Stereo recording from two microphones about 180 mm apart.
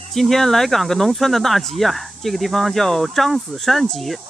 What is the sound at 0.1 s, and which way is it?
Speech, centre (ahead or behind).